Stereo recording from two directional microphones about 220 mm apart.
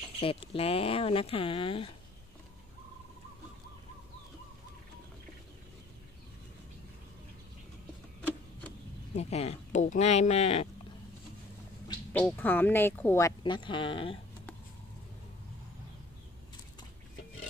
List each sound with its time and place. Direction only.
0.2 s speech: 25° left (ahead or behind)
9.1 s speech: 30° left (ahead or behind)
12.1 s speech: 5° left (ahead or behind)
13.4 s speech: 20° left (ahead or behind)